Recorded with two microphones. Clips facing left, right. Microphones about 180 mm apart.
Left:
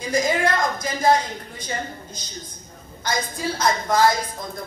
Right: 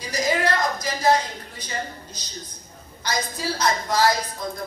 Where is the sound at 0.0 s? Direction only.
50° left (ahead or behind).